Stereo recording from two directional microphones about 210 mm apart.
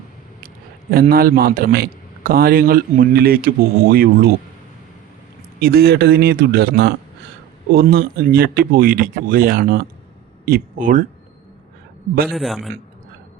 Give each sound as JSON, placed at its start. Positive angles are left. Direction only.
{"t": 0.4, "sound": "a sound", "side_deg": -45}
{"t": 1.1, "sound": "a man's voice", "side_deg": -45}
{"t": 5.5, "sound": "a man's voice", "side_deg": -50}
{"t": 12.3, "sound": "a man's voice", "side_deg": 0}